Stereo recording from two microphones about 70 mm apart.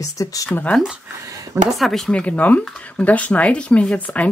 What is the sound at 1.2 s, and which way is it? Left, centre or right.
Speech, right.